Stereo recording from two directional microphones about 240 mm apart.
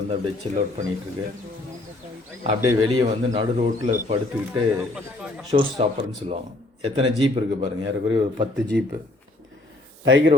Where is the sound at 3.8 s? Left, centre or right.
Right.